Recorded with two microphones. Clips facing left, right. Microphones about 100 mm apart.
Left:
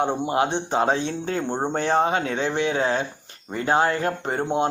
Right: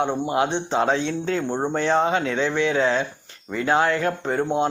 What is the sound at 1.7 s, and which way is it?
A man's voice, 50° left (ahead or behind).